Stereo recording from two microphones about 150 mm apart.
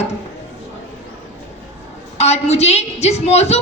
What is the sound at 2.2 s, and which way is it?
A woman's voice, 45° left (ahead or behind).